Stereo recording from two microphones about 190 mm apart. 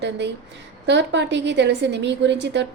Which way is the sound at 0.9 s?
65° right (ahead or behind).